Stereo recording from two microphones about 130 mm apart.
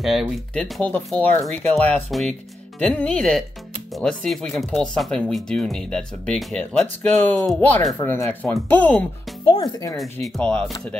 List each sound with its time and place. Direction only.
0.0 s speech: centre (ahead or behind)
0.6 s speech: 10° left (ahead or behind)
2.0 s speech: centre (ahead or behind)
8.0 s speech: 15° left (ahead or behind)
9.6 s speech: 25° left (ahead or behind)
10.2 s speech: 5° left (ahead or behind)